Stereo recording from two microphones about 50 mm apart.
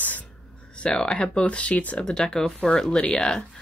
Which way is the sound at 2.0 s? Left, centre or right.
Centre.